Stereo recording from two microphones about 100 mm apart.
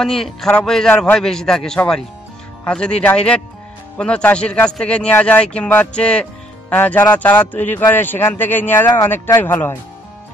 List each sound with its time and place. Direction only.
0.0 s a man's voice: 5° left (ahead or behind); by 9.8 s 20° left (ahead or behind)